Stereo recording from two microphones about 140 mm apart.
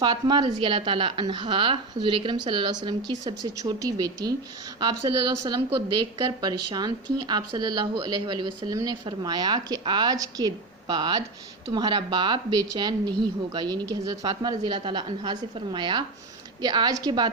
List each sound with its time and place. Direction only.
0.0 s speech: 30° right (ahead or behind)
6.4 s speech: 30° right (ahead or behind)